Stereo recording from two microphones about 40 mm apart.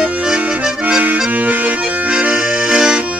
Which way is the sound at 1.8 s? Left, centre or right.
Right.